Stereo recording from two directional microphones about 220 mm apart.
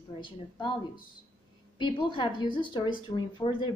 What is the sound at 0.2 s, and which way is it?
A woman's voice, 20° left (ahead or behind).